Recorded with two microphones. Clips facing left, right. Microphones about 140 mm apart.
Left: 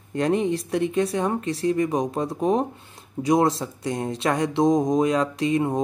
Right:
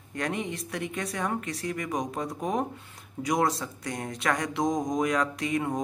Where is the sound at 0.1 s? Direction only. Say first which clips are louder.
Left 10 dB; 30° left (ahead or behind).